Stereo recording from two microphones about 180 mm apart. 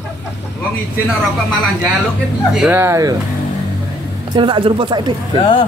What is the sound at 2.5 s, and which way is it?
Speech, 5° right (ahead or behind).